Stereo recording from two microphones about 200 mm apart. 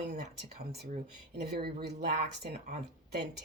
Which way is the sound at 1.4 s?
50° right (ahead or behind).